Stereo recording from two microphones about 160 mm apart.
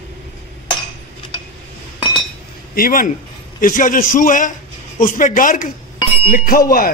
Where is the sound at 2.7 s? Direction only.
65° left (ahead or behind).